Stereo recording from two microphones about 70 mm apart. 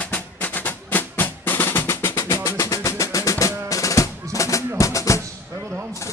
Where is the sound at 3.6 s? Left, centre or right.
Left.